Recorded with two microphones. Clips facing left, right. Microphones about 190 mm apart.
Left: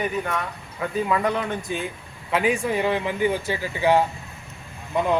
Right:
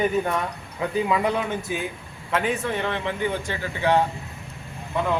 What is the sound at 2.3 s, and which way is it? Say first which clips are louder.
Speech: left 3 dB; 5° left (ahead or behind).